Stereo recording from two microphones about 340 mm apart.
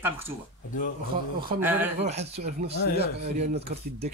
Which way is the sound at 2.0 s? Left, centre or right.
Centre.